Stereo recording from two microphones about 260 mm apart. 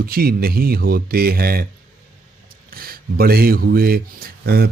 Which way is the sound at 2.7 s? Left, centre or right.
Right.